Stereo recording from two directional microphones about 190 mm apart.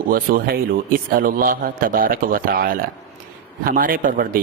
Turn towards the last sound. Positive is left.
turn(degrees=-50)  # may be behind; listen again after turning